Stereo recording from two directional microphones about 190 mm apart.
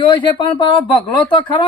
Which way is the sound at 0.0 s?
25° left (ahead or behind).